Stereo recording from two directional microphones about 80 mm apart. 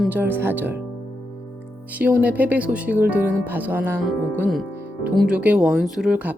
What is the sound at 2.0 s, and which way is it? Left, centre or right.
Speech, centre.